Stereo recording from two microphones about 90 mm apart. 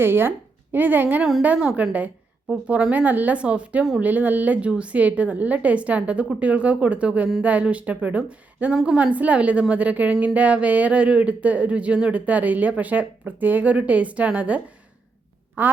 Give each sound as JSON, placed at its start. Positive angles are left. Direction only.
{"t": 0.0, "sound": "a woman's voice", "side_deg": -25}